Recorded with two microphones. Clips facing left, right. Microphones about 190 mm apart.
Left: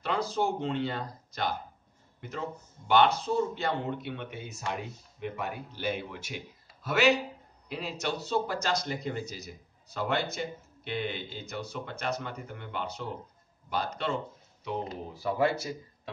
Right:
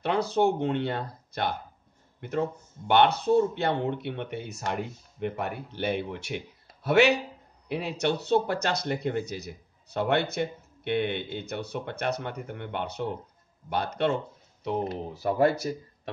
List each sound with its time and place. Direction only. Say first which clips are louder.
0.0 s speech: right 5 dB; 60° right (ahead or behind)
2.1 s a sound: right 10 dB; 55° right (ahead or behind)
2.9 s speech: right 3 dB; 60° right (ahead or behind)
15.2 s speech: right 4 dB; 45° right (ahead or behind)